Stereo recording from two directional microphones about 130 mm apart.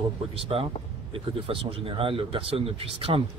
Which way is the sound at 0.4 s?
45° right (ahead or behind).